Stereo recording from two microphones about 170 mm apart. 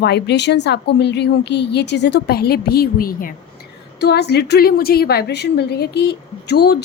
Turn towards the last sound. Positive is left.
turn(degrees=75)  # may be behind; listen again after turning